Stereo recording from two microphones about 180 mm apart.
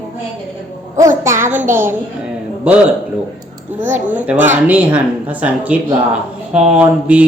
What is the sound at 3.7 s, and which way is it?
Speech, 10° right (ahead or behind).